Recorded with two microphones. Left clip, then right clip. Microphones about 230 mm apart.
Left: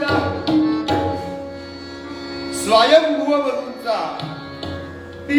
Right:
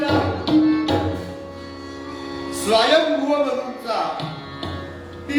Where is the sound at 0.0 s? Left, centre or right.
Left.